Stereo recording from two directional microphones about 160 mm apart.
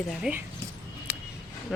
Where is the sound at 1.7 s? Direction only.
Centre (ahead or behind).